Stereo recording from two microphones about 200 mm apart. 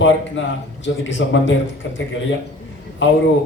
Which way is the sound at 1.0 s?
65° left (ahead or behind).